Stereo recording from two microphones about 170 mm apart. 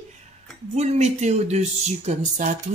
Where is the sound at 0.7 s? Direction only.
40° right (ahead or behind).